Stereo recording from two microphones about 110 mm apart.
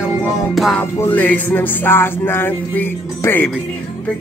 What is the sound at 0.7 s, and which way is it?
Music, 15° left (ahead or behind).